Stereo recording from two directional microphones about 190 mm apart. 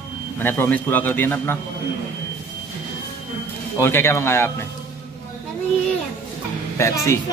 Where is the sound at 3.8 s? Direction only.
15° left (ahead or behind).